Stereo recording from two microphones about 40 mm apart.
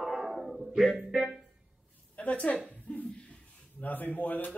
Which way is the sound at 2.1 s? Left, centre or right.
Left.